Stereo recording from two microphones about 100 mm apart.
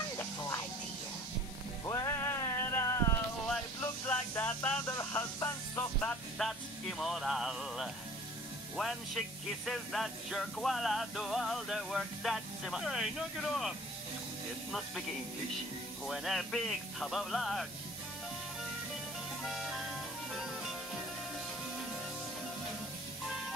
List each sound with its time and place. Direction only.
1.9 s music: 35° left (ahead or behind)
3.8 s a sound: 20° left (ahead or behind)
5.9 s music: 5° left (ahead or behind)
16.1 s music: centre (ahead or behind)
19.4 s music: centre (ahead or behind)